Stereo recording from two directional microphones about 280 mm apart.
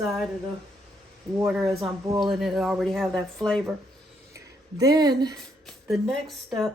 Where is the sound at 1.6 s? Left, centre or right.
Centre.